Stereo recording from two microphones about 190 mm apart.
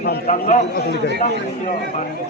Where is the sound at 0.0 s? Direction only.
55° left (ahead or behind).